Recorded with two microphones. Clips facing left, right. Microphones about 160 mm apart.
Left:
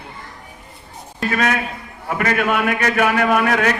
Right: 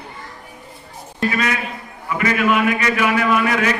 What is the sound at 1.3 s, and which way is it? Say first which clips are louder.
A man's voice: left 3 dB; 55° left (ahead or behind).